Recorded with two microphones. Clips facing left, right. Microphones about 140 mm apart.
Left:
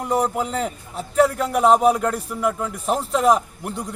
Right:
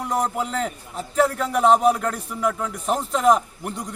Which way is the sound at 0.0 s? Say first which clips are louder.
Left 3 dB; 5° left (ahead or behind).